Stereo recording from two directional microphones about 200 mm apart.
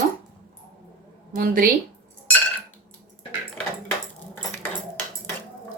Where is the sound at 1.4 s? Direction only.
45° right (ahead or behind).